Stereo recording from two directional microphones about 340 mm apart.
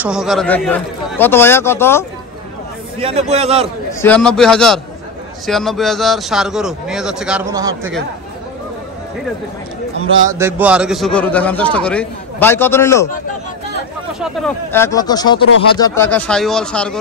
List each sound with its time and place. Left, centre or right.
0.0 s speech: centre
3.0 s a man's voice: centre
3.6 s speech: centre
10.4 s speech: centre
14.2 s speech: centre